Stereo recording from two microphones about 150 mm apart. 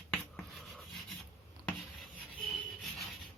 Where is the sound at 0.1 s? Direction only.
Centre (ahead or behind).